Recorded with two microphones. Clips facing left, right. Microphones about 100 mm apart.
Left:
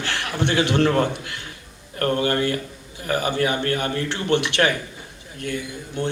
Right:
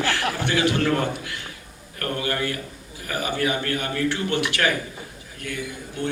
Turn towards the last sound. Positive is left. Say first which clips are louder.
# left 2 dB
turn(degrees=30)  # may be behind; listen again after turning